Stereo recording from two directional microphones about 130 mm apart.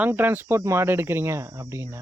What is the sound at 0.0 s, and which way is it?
Speech, 15° right (ahead or behind).